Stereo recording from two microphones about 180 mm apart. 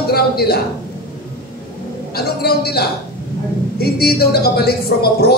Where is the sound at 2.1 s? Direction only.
60° left (ahead or behind).